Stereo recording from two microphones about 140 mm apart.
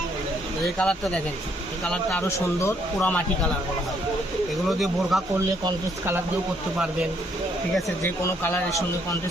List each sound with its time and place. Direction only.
0.6 s speech: 5° left (ahead or behind)
2.2 s speech: 20° left (ahead or behind)
5.1 s speech: centre (ahead or behind)
8.0 s speech: 15° left (ahead or behind)